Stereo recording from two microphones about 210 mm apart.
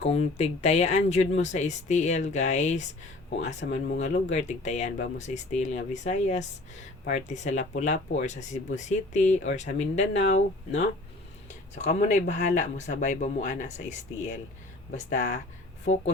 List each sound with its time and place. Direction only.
0.0 s speech: 30° left (ahead or behind)
14.9 s speech: 35° left (ahead or behind)